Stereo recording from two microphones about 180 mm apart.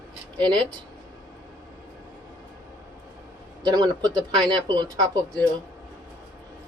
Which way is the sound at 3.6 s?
20° right (ahead or behind).